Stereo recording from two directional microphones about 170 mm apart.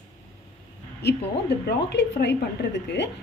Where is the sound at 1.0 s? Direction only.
80° left.